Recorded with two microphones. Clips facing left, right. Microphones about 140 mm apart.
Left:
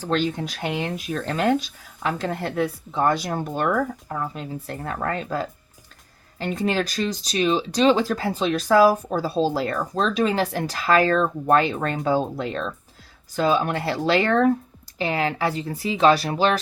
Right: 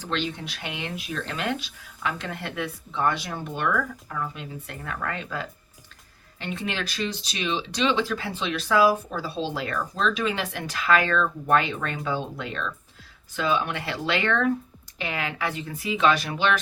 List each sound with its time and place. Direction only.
0.0 s speech: 45° left (ahead or behind)